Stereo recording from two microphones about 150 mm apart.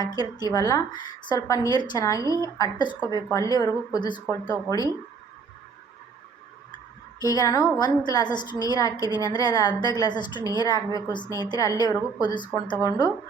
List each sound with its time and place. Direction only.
0.0 s a woman's voice: 25° left (ahead or behind)
3.0 s a woman's voice: 25° right (ahead or behind)
3.2 s a woman's voice: 20° left (ahead or behind)
7.2 s a woman's voice: 25° left (ahead or behind)